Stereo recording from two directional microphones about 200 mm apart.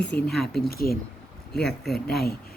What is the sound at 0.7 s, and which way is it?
Speech, 50° left (ahead or behind).